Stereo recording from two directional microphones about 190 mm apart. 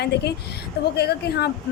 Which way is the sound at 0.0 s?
60° left (ahead or behind).